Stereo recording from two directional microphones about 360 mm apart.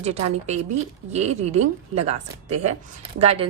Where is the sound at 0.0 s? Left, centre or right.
Centre.